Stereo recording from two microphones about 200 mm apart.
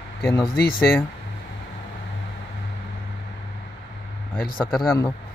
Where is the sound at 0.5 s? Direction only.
45° left (ahead or behind).